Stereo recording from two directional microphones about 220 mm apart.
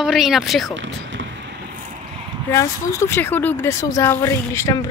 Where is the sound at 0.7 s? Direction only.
55° right (ahead or behind).